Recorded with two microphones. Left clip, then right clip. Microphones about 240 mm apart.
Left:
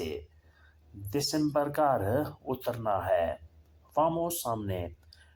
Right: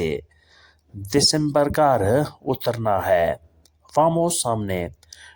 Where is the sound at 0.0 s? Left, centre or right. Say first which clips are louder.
Right 11 dB; right.